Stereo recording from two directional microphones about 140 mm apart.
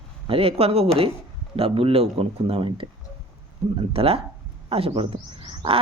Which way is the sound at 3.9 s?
40° right (ahead or behind).